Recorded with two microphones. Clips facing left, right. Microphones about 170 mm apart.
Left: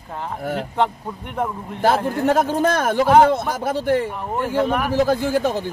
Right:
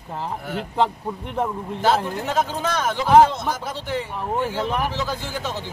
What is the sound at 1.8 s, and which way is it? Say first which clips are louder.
A man's voice: left 3 dB; 55° left (ahead or behind).